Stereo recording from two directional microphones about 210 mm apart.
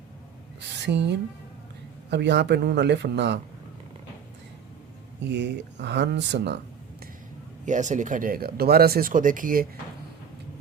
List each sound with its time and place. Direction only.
0.9 s speech: 55° right (ahead or behind)
5.3 s speech: 55° right (ahead or behind)
7.6 s speech: 35° right (ahead or behind)